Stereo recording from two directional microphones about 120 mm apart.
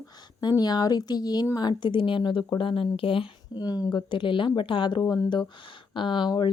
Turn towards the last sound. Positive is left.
turn(degrees=40)  # may be behind; listen again after turning